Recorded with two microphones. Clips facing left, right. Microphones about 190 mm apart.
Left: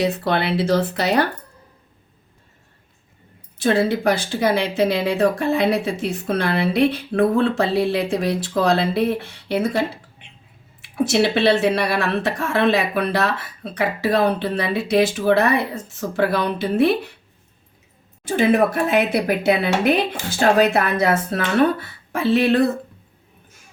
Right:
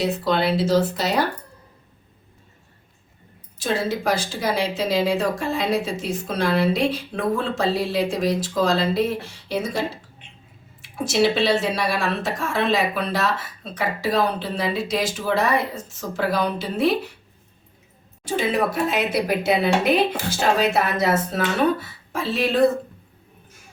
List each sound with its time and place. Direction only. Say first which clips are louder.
0.0 s speech: left 1 dB; 65° left (ahead or behind)
3.6 s speech: left 6 dB; 60° left (ahead or behind)
10.8 s speech: left 2 dB; 60° left (ahead or behind)
18.3 s speech: left 5 dB; 55° left (ahead or behind)